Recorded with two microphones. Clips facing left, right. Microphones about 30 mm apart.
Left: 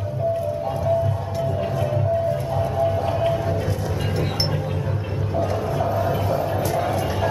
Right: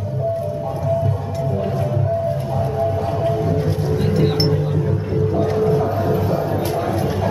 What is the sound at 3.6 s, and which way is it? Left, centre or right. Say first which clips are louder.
Music: right 5 dB; right.